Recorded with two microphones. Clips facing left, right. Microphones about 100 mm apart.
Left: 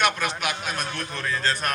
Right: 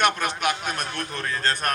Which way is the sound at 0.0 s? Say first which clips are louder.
Right 2 dB; 50° right (ahead or behind).